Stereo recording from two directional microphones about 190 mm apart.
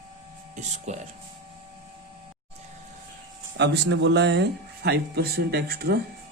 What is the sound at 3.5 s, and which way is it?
Speech, 65° right (ahead or behind).